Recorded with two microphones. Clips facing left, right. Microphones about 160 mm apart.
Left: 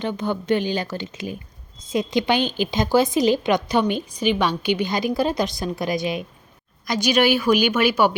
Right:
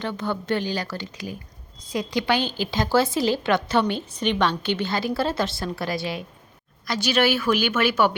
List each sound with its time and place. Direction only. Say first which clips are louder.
0.0 s a woman's voice: left 3 dB; 20° left (ahead or behind)